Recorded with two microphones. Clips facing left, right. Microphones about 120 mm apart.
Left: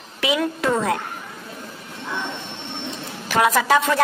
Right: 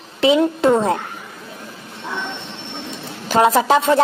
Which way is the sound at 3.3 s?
30° right (ahead or behind).